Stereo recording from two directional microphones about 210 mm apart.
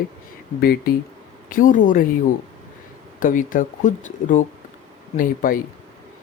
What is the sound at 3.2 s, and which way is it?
Speech, 40° left (ahead or behind).